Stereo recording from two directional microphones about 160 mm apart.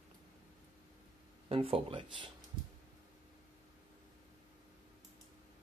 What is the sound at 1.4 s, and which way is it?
Speech, 35° right (ahead or behind).